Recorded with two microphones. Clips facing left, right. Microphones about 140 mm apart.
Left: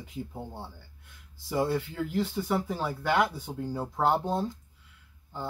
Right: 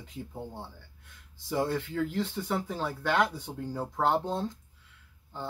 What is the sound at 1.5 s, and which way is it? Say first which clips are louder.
Speech: left 2 dB; 5° left (ahead or behind).